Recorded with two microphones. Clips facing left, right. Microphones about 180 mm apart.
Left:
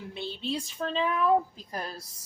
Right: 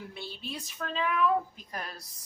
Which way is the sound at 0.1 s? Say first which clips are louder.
Left 7 dB; 25° left (ahead or behind).